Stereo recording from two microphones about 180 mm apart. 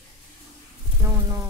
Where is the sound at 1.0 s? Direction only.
15° right (ahead or behind).